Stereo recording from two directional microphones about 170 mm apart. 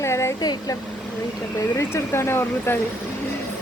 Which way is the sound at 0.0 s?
15° left (ahead or behind).